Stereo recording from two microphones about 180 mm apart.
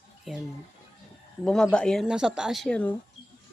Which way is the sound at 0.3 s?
Centre (ahead or behind).